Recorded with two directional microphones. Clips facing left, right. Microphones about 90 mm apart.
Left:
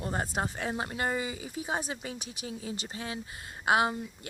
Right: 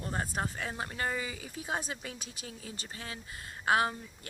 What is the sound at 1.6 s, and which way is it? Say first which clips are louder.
Speech: left 2 dB; 15° left (ahead or behind).